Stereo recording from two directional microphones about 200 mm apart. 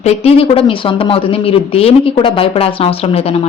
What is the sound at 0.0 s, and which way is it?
Speech, 30° left (ahead or behind).